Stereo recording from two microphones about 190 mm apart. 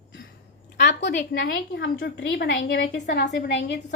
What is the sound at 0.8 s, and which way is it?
A woman's voice, 65° left (ahead or behind).